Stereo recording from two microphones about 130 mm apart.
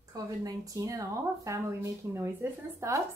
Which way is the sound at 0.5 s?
25° right (ahead or behind).